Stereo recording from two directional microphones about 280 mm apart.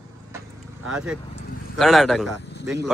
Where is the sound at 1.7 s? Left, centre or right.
Centre.